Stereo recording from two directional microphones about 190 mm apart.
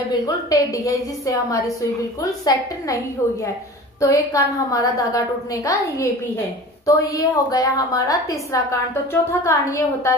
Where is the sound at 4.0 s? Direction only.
15° left (ahead or behind).